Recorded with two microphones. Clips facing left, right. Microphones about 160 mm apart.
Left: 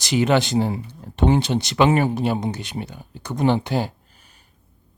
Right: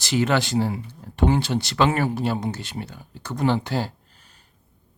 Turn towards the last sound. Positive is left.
turn(degrees=10)  # may be behind; listen again after turning